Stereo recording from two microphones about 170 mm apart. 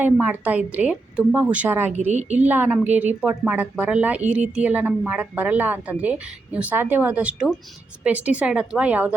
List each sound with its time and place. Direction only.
0.0 s a woman's voice: 10° right (ahead or behind)
2.0 s a woman's voice: 45° right (ahead or behind)
2.4 s a woman's voice: 10° right (ahead or behind)